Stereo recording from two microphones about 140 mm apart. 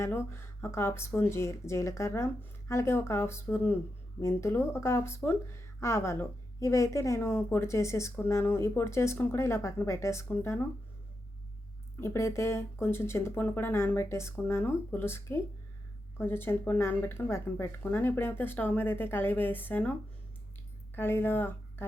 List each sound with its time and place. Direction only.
0.0 s speech: 20° left (ahead or behind)
11.9 s speech: 20° left (ahead or behind)